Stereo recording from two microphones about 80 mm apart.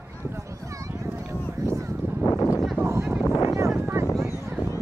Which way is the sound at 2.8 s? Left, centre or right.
Right.